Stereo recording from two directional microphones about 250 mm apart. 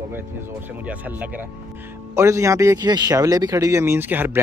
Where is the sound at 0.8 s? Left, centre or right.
Centre.